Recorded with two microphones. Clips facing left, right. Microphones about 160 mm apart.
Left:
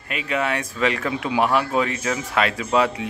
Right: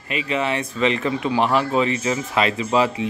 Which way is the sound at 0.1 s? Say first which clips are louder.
Right 1 dB; centre (ahead or behind).